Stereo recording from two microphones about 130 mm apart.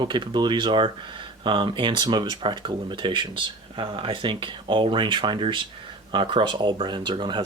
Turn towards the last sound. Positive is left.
turn(degrees=-35)  # may be behind; listen again after turning